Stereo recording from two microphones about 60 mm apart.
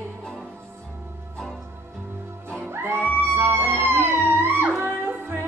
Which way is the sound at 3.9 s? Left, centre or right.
Right.